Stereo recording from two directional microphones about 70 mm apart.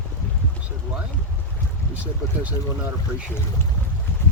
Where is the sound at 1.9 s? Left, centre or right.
Right.